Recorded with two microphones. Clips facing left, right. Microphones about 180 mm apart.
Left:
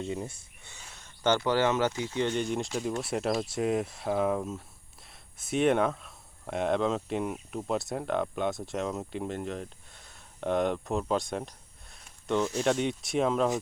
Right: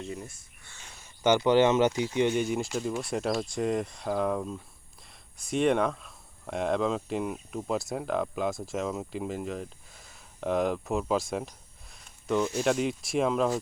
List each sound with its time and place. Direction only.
0.0 s speech: 25° left (ahead or behind)
0.9 s speech: 5° right (ahead or behind)